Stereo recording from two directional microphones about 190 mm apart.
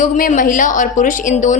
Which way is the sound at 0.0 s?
45° left (ahead or behind).